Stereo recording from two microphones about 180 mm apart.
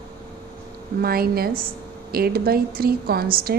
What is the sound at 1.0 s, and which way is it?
A woman's voice, 55° right (ahead or behind).